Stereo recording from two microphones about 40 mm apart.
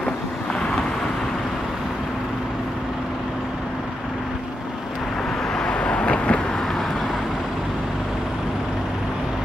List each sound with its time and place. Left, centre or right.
5.6 s vehicle: left